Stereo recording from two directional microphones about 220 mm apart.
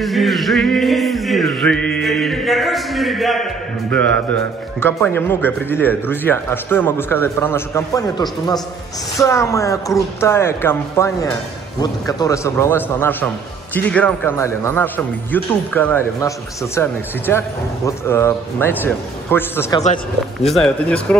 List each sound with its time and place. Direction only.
0.0 s music: centre (ahead or behind)
4.8 s speech: 10° left (ahead or behind)